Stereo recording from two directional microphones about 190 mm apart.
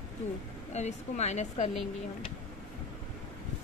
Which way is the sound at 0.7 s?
35° left (ahead or behind).